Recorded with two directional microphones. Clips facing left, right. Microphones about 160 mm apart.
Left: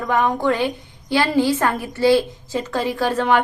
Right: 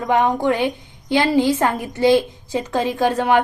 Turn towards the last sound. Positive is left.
turn(degrees=-15)  # may be behind; listen again after turning